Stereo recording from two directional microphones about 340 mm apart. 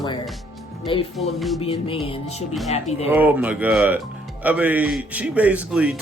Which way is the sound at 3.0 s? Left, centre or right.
Centre.